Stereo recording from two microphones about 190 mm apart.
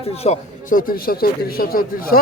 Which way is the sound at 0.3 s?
45° left (ahead or behind).